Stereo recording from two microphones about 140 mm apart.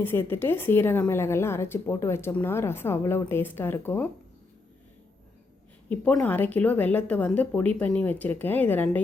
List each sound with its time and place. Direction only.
0.0 s a woman's voice: 15° left (ahead or behind)
5.9 s a woman's voice: 10° left (ahead or behind)